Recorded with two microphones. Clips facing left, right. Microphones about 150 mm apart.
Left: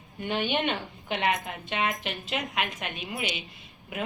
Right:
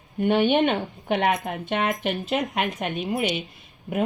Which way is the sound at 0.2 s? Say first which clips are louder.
Right 9 dB; 55° right (ahead or behind).